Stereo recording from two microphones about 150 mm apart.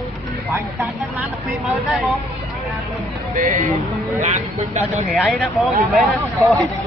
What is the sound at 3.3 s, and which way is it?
Speech, 60° right (ahead or behind).